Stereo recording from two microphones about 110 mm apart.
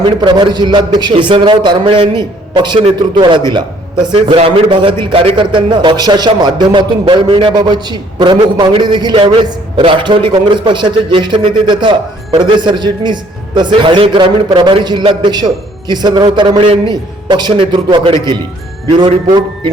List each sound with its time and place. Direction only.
0.2 s a man's voice: 45° right (ahead or behind)
9.1 s a man's voice: 55° right (ahead or behind)